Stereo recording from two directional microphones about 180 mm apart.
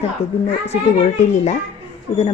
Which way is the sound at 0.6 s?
40° left (ahead or behind).